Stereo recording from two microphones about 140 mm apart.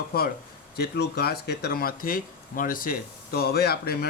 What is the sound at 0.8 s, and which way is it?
Speech, 90° left.